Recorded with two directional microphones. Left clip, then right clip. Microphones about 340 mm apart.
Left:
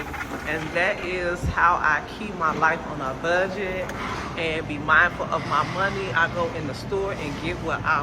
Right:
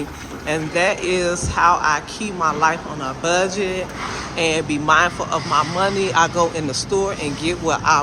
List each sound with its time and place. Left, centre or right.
0.4 s speech: centre